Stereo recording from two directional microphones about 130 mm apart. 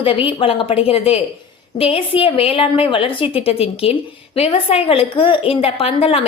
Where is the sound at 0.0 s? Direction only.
45° left (ahead or behind).